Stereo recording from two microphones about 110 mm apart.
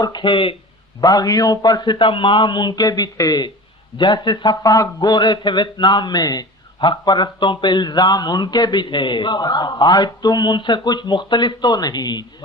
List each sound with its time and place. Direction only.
0.0 s speech: 40° left (ahead or behind)
1.0 s a man's voice: 35° left (ahead or behind)